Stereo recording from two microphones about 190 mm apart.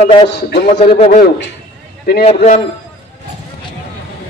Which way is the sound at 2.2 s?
35° left (ahead or behind).